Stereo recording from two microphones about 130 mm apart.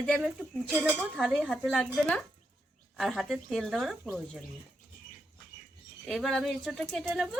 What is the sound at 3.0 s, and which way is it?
Speech, centre (ahead or behind).